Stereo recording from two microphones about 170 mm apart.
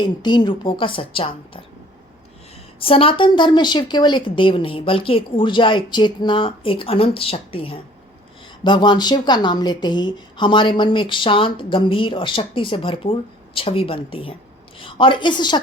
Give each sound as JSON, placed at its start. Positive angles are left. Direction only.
{"t": 0.0, "sound": "a woman's voice", "side_deg": 25}
{"t": 2.8, "sound": "a woman's voice", "side_deg": 35}